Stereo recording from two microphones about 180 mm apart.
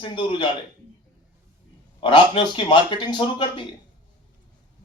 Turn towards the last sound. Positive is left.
turn(degrees=25)  # may be behind; listen again after turning